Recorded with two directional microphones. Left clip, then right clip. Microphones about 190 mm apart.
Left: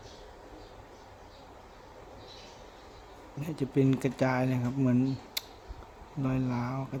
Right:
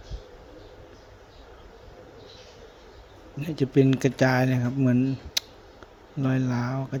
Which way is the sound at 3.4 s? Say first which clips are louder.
Right 7 dB; 25° right (ahead or behind).